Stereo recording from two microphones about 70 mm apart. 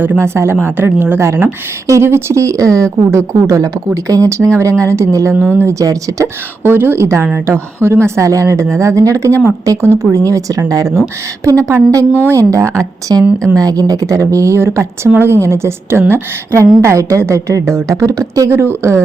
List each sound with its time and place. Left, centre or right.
0.2 s a woman's voice: right
5.8 s speech: right
6.2 s a woman's voice: right
12.1 s a woman's voice: right
12.5 s speech: right
13.6 s a woman's voice: right
18.8 s a woman's voice: right